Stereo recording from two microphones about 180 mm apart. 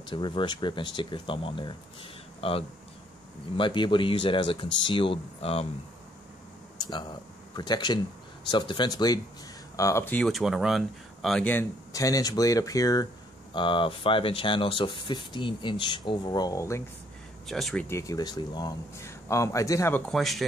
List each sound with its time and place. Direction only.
0.1 s speech: 25° left (ahead or behind)
6.8 s speech: 25° left (ahead or behind)
17.5 s speech: centre (ahead or behind)
17.8 s speech: 15° left (ahead or behind)
20.1 s speech: centre (ahead or behind)